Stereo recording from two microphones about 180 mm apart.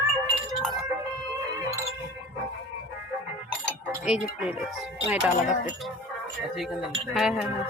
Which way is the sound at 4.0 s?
5° right (ahead or behind).